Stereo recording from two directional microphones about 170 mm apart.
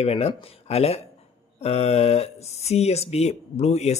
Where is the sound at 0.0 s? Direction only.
35° left (ahead or behind).